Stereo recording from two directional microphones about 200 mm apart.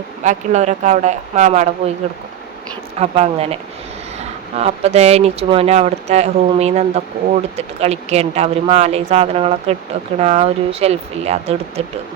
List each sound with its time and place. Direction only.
0.3 s speech: 35° right (ahead or behind)
3.0 s speech: 30° right (ahead or behind)